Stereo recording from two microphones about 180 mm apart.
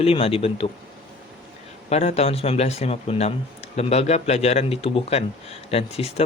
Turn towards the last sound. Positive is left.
turn(degrees=35)  # may be behind; listen again after turning